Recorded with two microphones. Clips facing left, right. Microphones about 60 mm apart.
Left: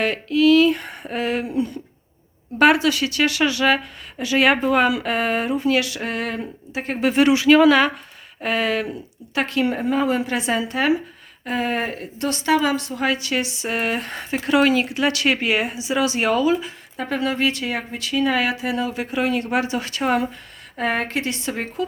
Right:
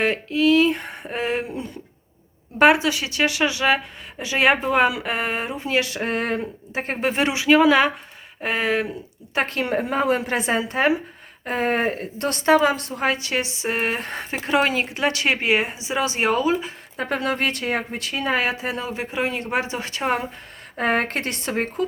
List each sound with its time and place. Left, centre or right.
0.0 s speech: right
9.3 s speech: right
20.7 s speech: right